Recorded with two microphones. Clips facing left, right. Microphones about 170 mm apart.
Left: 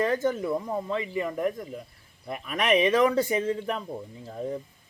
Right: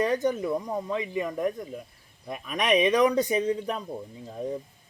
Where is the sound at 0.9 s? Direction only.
15° right (ahead or behind).